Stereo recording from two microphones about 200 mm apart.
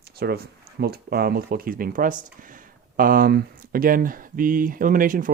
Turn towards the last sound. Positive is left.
turn(degrees=-40)  # may be behind; listen again after turning